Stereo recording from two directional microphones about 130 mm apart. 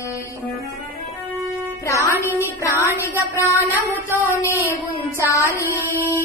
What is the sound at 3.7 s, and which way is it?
Child singing, 15° right (ahead or behind).